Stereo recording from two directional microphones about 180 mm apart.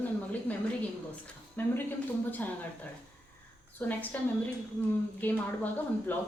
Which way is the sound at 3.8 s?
10° left (ahead or behind).